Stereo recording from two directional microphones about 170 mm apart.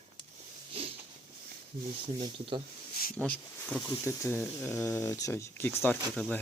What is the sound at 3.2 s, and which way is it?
Speech, 5° left (ahead or behind).